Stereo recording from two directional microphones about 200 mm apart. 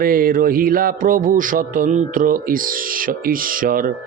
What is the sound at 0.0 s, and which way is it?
Speech, 45° right (ahead or behind).